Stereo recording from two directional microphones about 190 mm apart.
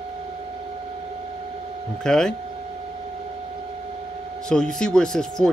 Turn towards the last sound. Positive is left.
turn(degrees=5)  # may be behind; listen again after turning